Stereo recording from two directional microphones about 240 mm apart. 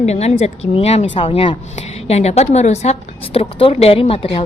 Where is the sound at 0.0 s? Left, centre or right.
Left.